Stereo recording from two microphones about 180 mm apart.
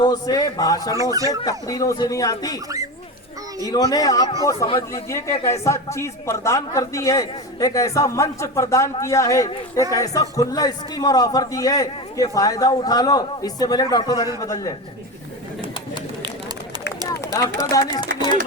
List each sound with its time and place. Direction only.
0.0 s a man's voice: 20° left (ahead or behind)
3.7 s a man's voice: 20° left (ahead or behind)
5.0 s a man's voice: 15° left (ahead or behind)
17.1 s speech: 20° left (ahead or behind)